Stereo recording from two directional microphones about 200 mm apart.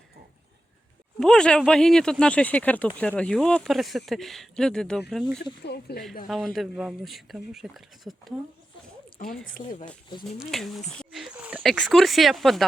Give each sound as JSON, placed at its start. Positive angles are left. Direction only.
{"t": 1.2, "sound": "speech", "side_deg": 5}
{"t": 5.6, "sound": "speech", "side_deg": 55}
{"t": 6.2, "sound": "speech", "side_deg": 0}